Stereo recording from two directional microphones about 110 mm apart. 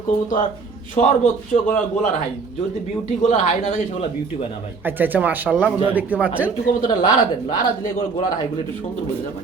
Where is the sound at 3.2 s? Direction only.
90° left.